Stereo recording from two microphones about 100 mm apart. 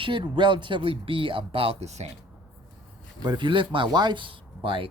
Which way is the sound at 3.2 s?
50° right (ahead or behind).